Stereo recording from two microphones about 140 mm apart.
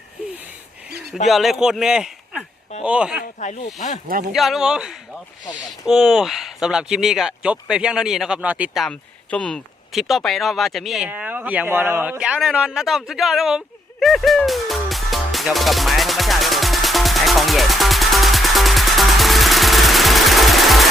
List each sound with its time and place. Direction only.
1.3 s a man's voice: centre (ahead or behind)
3.4 s speech: 60° left (ahead or behind)
4.3 s speech: centre (ahead or behind)
8.8 s speech: 5° left (ahead or behind)
11.1 s a man's voice: 15° right (ahead or behind)
14.0 s music: centre (ahead or behind)